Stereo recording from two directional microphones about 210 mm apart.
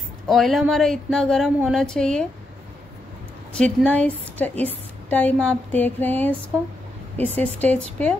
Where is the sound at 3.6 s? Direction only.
5° left (ahead or behind).